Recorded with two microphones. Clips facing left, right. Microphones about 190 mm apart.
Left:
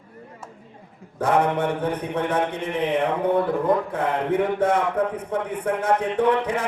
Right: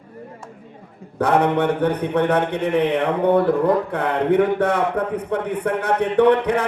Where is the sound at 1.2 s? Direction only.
65° right (ahead or behind).